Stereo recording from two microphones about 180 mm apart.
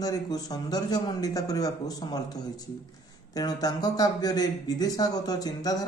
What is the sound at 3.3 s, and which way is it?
A man's voice, 20° left (ahead or behind).